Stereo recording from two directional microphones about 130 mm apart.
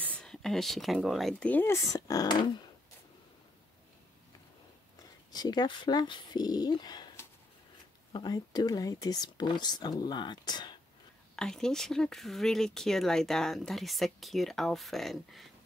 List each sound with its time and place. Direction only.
0.0 s speech: 10° left (ahead or behind)
1.4 s speech: 15° left (ahead or behind)
1.9 s speech: 25° left (ahead or behind)
5.3 s speech: 30° left (ahead or behind)
8.1 s speech: 30° left (ahead or behind)
11.3 s speech: 5° left (ahead or behind)